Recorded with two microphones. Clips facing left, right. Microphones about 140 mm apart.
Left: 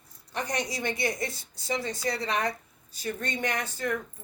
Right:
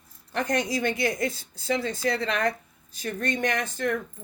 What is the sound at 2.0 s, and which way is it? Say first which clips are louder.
Speech: right 3 dB; 55° right (ahead or behind).